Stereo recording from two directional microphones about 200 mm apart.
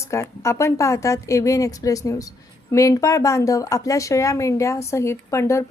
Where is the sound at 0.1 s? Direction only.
15° left (ahead or behind).